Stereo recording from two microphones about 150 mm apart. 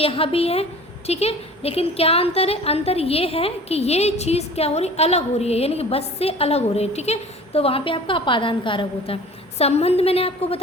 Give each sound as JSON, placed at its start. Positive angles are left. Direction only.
{"t": 0.0, "sound": "a woman's voice", "side_deg": 40}
{"t": 9.6, "sound": "a woman's voice", "side_deg": 45}